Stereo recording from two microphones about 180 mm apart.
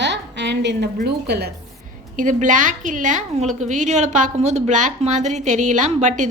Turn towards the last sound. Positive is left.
turn(degrees=-40)  # may be behind; listen again after turning